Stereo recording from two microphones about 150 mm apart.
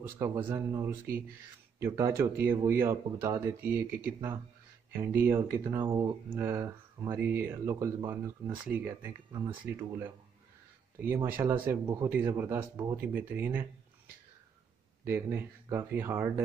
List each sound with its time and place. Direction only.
0.4 s speech: 15° right (ahead or behind)
9.3 s speech: 35° right (ahead or behind)
9.7 s speech: 15° right (ahead or behind)
15.0 s speech: 15° right (ahead or behind)